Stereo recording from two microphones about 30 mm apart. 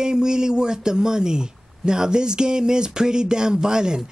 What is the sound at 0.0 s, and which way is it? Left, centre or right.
Speech, right.